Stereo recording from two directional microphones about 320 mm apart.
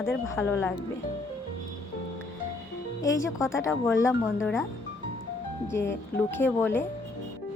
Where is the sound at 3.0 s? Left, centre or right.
Centre.